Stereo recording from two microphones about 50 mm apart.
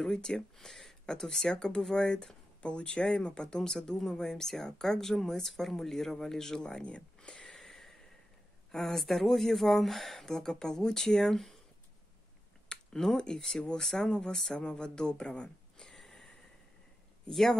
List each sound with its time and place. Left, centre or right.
0.0 s speech: centre
7.6 s a sound: centre
8.7 s speech: centre
12.6 s speech: centre
17.3 s speech: centre